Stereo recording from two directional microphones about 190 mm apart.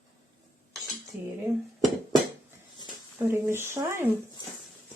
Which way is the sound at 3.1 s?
15° right (ahead or behind).